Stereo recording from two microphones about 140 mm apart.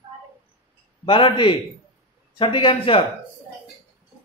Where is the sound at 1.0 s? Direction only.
35° left (ahead or behind).